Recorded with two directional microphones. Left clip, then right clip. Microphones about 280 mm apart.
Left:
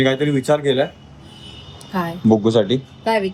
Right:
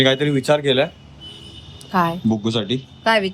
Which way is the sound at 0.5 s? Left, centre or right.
Right.